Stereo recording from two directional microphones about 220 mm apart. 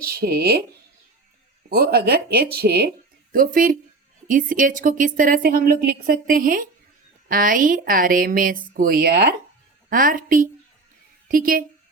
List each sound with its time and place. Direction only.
0.0 s speech: 45° right (ahead or behind)
1.7 s a woman's voice: 45° right (ahead or behind)